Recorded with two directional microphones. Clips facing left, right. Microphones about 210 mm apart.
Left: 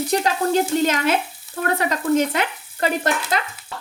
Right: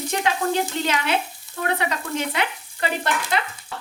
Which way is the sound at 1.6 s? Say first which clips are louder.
Left 5 dB; 45° left (ahead or behind).